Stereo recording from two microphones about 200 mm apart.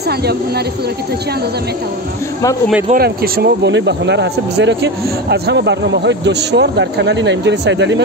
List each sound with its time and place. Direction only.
2.9 s speech: 50° right (ahead or behind)